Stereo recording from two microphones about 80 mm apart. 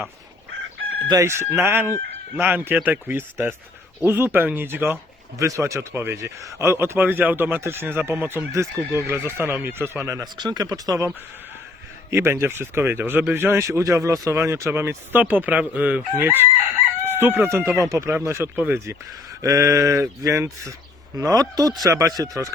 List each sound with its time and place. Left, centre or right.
1.2 s speech: right
5.4 s speech: right
10.3 s speech: right
10.6 s speech: right
12.1 s speech: right
17.7 s speech: right
18.5 s speech: centre
19.4 s speech: right
21.2 s speech: right
21.8 s speech: right